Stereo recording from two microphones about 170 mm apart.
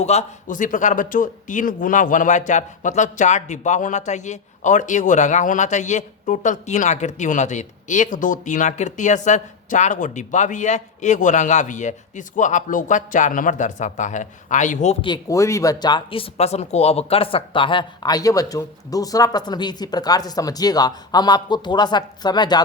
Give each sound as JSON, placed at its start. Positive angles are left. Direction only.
{"t": 0.0, "sound": "a man's voice", "side_deg": 40}
{"t": 15.0, "sound": "speech", "side_deg": 20}